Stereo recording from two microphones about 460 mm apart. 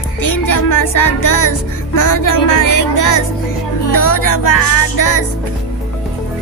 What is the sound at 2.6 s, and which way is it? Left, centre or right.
Music, left.